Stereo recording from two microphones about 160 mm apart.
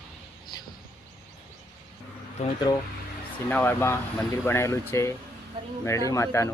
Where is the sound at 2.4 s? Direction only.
45° left (ahead or behind).